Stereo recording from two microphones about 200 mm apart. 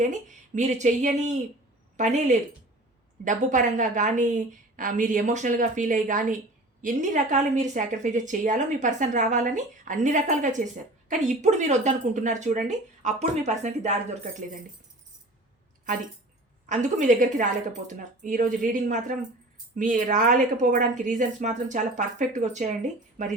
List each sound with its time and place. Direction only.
0.0 s a woman's voice: 40° right (ahead or behind)
16.6 s a woman's voice: 40° right (ahead or behind)